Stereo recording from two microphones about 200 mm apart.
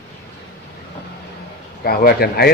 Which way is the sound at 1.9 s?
50° left (ahead or behind).